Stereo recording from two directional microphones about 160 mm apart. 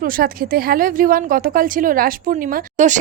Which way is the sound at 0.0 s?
65° right (ahead or behind).